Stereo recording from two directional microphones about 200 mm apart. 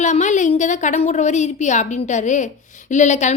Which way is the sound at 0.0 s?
35° left (ahead or behind).